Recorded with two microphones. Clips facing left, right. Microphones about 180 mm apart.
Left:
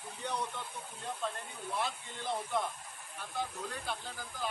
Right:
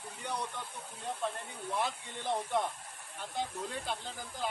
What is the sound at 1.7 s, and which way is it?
Speech, 15° right (ahead or behind).